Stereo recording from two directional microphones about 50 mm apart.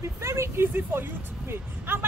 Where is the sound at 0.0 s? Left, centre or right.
Right.